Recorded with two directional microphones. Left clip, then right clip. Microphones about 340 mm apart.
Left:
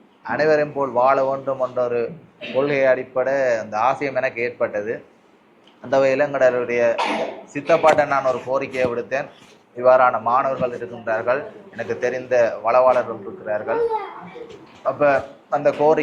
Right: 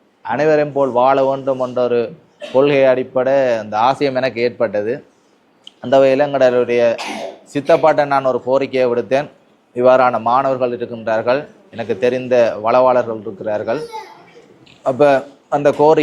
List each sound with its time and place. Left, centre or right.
0.3 s a man's voice: right
14.8 s a man's voice: right